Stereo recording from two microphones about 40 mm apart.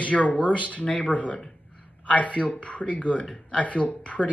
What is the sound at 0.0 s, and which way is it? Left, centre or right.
Speech, left.